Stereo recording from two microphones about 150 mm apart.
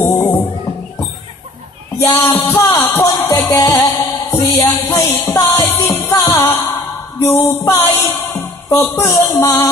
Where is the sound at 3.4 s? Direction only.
25° left (ahead or behind).